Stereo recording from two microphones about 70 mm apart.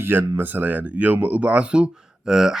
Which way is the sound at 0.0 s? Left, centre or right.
Right.